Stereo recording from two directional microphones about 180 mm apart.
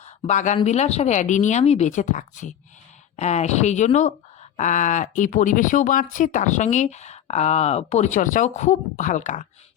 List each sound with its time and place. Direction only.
0.0 s speech: 40° left (ahead or behind)